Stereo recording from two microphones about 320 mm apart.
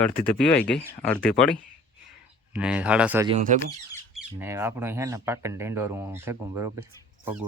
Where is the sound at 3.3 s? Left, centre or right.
Right.